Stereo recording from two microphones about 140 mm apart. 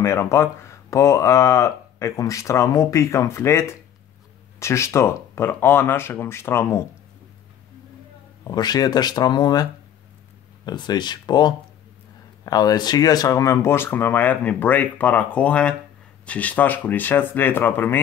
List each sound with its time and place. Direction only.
0.0 s speech: 20° left (ahead or behind)
8.5 s speech: 30° left (ahead or behind); by 18.0 s 15° left (ahead or behind)